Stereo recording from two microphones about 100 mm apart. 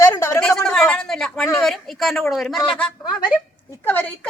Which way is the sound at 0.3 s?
5° left (ahead or behind).